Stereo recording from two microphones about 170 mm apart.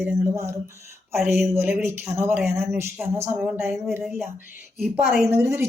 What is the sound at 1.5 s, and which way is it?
A woman's voice, 15° right (ahead or behind).